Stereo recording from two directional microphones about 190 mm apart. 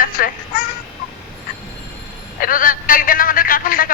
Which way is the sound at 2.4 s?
45° left (ahead or behind).